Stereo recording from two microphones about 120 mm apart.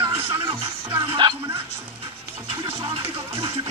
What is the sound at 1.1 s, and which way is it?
Speech, 40° right (ahead or behind).